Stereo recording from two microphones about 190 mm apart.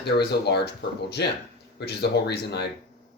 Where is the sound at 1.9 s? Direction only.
60° left (ahead or behind).